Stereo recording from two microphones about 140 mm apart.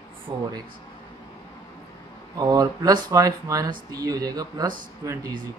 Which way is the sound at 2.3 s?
25° right (ahead or behind).